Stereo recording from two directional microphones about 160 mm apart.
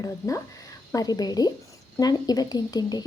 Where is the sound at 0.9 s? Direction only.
25° left (ahead or behind).